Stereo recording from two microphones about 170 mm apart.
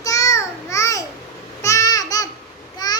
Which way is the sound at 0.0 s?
20° left (ahead or behind).